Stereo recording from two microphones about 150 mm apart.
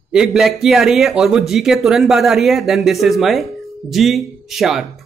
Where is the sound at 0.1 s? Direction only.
5° right (ahead or behind).